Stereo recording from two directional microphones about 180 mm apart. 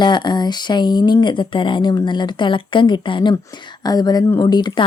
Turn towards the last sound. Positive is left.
turn(degrees=25)  # may be behind; listen again after turning